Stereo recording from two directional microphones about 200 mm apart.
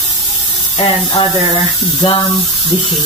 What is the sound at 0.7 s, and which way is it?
Speech, 25° left (ahead or behind).